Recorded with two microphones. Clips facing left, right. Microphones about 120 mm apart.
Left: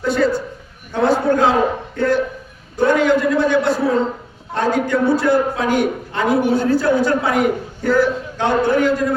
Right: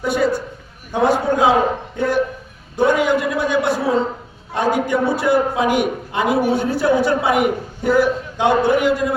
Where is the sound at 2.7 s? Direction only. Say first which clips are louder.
Left 1 dB; 15° right (ahead or behind).